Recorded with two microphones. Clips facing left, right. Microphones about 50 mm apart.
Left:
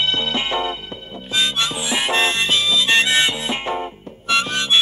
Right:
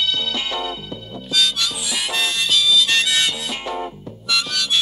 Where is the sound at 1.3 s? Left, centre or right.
Left.